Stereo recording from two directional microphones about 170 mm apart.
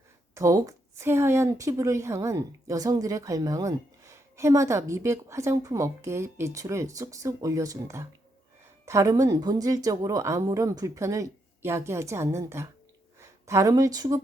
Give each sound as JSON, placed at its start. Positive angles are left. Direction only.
{"t": 0.3, "sound": "a woman's voice", "side_deg": -20}